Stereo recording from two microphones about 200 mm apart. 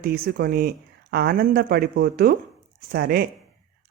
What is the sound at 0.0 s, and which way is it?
Speech, 50° right (ahead or behind).